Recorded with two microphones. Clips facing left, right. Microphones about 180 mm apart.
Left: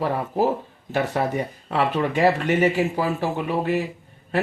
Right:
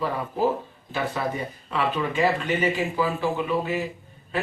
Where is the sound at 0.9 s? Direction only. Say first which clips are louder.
Left 4 dB; 70° left (ahead or behind).